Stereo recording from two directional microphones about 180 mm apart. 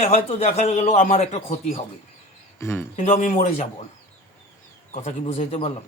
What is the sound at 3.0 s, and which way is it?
Speech, 40° left (ahead or behind).